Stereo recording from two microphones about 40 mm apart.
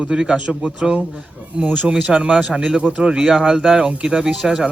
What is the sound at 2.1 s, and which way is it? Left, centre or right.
Speech, right.